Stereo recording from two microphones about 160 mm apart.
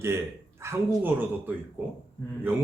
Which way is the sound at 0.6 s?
15° right (ahead or behind).